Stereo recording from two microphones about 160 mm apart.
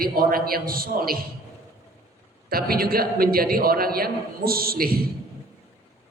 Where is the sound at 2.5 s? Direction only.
70° right (ahead or behind).